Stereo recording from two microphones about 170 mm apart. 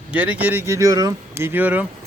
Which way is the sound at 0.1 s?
10° right (ahead or behind).